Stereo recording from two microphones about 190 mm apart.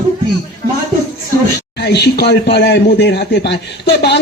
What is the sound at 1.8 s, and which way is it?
Speech, 60° left (ahead or behind).